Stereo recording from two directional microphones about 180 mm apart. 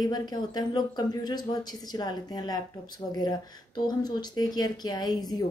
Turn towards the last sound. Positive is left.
turn(degrees=20)  # may be behind; listen again after turning